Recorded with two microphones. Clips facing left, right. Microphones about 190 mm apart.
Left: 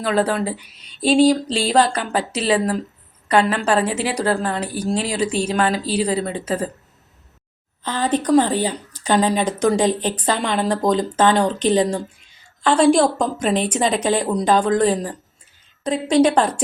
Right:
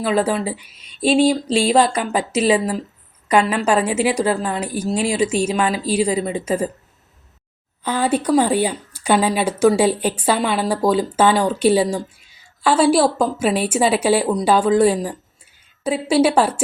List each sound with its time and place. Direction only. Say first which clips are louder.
0.0 s a woman's voice: right 1 dB; 10° right (ahead or behind)
0.5 s speech: left 1 dB; 40° left (ahead or behind)
1.7 s a woman's voice: left 2 dB; 10° right (ahead or behind)
7.9 s a woman's voice: right 1 dB; 10° right (ahead or behind)